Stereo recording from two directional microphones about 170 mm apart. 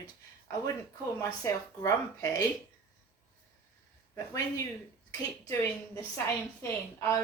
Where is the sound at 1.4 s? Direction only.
15° left (ahead or behind).